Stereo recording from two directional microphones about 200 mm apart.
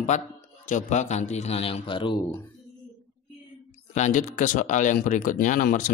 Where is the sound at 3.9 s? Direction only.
35° left (ahead or behind).